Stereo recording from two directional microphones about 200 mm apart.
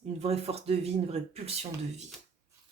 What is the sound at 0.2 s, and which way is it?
Speech, 30° right (ahead or behind).